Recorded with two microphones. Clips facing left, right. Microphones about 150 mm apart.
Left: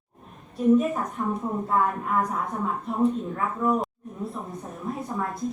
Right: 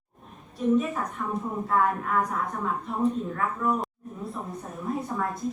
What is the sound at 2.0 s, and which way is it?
Speech, centre (ahead or behind).